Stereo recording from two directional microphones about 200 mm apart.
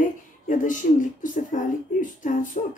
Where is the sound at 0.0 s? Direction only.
40° left (ahead or behind).